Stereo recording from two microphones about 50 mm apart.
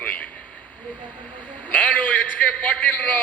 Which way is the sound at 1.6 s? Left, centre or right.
Left.